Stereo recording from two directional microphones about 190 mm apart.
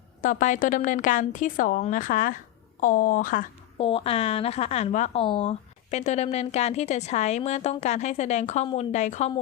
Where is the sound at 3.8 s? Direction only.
30° left (ahead or behind).